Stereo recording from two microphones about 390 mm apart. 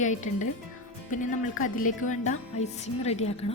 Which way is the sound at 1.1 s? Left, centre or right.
Centre.